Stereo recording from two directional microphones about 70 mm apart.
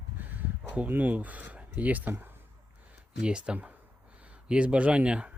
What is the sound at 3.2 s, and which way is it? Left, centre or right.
Speech, centre.